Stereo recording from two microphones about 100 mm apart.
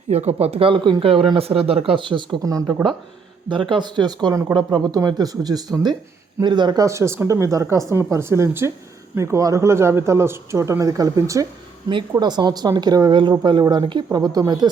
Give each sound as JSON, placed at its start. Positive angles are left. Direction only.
{"t": 0.1, "sound": "speech", "side_deg": -90}
{"t": 1.4, "sound": "speech", "side_deg": -75}
{"t": 1.9, "sound": "speech", "side_deg": -55}
{"t": 2.4, "sound": "speech", "side_deg": -35}
{"t": 3.5, "sound": "speech", "side_deg": -55}
{"t": 6.8, "sound": "speech", "side_deg": -30}
{"t": 12.1, "sound": "speech", "side_deg": -45}